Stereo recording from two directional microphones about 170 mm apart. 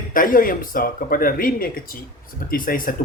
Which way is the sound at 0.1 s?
55° left (ahead or behind).